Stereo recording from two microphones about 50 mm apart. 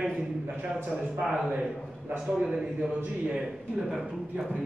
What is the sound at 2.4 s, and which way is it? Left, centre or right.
Speech, centre.